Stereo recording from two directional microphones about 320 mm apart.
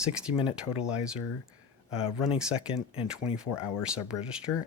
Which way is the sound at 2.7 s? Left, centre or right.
Centre.